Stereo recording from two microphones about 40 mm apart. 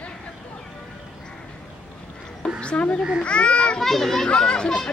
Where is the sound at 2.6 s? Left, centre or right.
Left.